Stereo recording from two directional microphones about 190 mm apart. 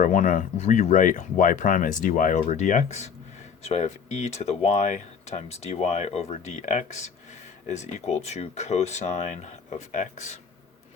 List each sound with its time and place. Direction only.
0.0 s speech: 45° left (ahead or behind)